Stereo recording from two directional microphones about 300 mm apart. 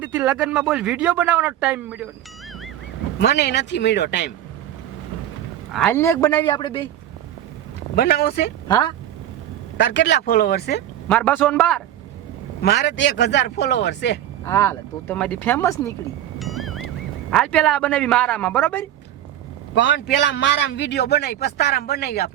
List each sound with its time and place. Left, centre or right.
0.0 s speech: centre
3.2 s a man's voice: left
5.7 s speech: centre
7.9 s a man's voice: left
8.6 s speech: centre
9.7 s a man's voice: left
11.1 s speech: centre
12.6 s a man's voice: left
14.4 s speech: centre
16.4 s music: centre
17.3 s speech: centre
19.7 s a man's voice: left